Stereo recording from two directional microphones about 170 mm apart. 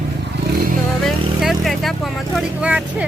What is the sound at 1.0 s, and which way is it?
Vehicle, centre (ahead or behind).